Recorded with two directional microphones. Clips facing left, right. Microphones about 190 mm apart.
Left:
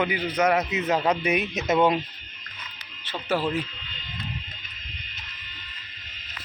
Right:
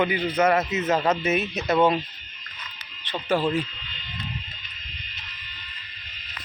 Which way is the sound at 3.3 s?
15° right (ahead or behind).